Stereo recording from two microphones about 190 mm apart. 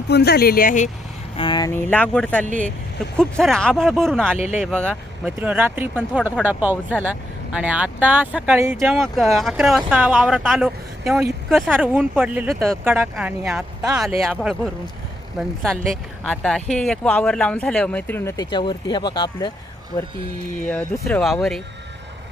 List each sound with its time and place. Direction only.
0.1 s speech: 60° left (ahead or behind)
1.4 s speech: 25° left (ahead or behind)
1.7 s speech: 10° left (ahead or behind)
5.4 s speech: 10° right (ahead or behind)
8.8 s speech: centre (ahead or behind)
12.8 s speech: 10° right (ahead or behind)
15.9 s speech: centre (ahead or behind); by 19.5 s 20° left (ahead or behind)
20.7 s speech: 5° left (ahead or behind)